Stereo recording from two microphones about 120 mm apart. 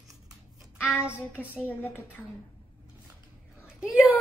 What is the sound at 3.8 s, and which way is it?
Speech, 5° right (ahead or behind).